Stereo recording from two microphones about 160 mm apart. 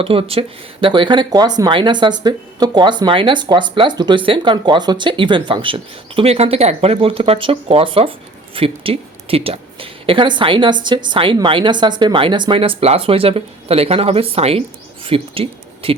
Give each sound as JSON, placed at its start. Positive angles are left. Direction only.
{"t": 0.0, "sound": "a woman's voice", "side_deg": -35}